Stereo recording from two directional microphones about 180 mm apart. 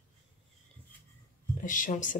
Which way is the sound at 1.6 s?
45° left (ahead or behind).